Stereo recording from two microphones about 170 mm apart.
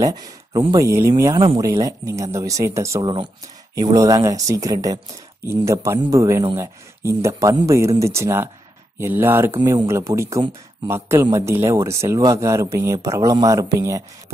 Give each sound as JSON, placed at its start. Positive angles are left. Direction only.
{"t": 0.0, "sound": "a man's voice", "side_deg": -25}